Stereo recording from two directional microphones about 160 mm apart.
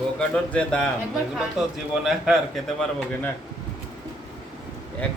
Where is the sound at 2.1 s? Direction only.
Centre (ahead or behind).